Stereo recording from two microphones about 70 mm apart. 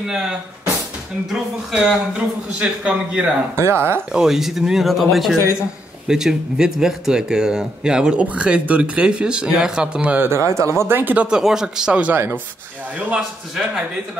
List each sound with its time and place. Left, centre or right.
0.0 s speech: centre
3.5 s speech: right
4.1 s speech: centre
10.0 s speech: right
10.3 s speech: right
10.8 s speech: right
11.2 s speech: centre